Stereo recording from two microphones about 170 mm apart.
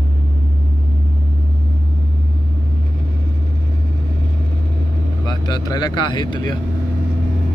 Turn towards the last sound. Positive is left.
turn(degrees=25)  # may be behind; listen again after turning